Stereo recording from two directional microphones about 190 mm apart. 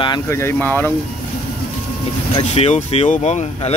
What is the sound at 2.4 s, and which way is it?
Speech, 35° left (ahead or behind).